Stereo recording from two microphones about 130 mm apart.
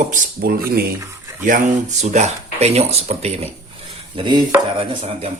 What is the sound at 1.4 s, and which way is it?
Speech, 80° right.